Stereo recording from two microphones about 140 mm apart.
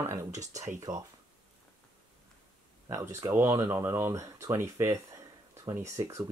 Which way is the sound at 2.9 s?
20° right (ahead or behind).